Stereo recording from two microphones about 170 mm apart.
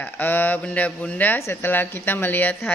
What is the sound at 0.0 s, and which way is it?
Speech, 10° left (ahead or behind).